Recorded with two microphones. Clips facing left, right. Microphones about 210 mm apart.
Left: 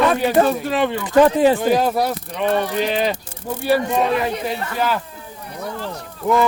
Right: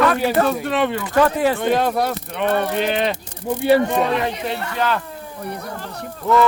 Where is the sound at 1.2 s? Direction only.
15° left (ahead or behind).